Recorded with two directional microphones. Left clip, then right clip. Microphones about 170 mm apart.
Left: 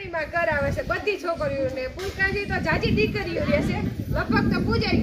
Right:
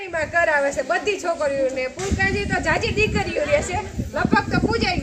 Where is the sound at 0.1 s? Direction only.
20° right (ahead or behind).